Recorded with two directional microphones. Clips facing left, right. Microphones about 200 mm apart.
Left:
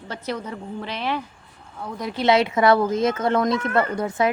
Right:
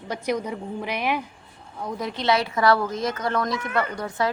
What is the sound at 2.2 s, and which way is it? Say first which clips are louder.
A woman's voice: left 4 dB; 20° left (ahead or behind).